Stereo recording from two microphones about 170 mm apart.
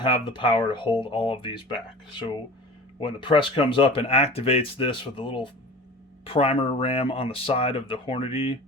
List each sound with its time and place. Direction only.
0.0 s speech: 30° left (ahead or behind)
3.0 s speech: 30° left (ahead or behind)